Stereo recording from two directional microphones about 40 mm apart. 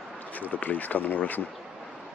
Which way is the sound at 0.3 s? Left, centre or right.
Left.